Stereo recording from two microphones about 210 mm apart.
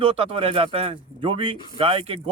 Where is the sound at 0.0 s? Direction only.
25° right (ahead or behind).